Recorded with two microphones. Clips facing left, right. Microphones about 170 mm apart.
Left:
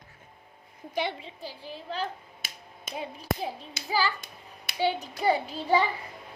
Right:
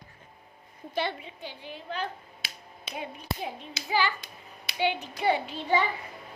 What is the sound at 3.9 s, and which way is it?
A child's voice, 40° left (ahead or behind).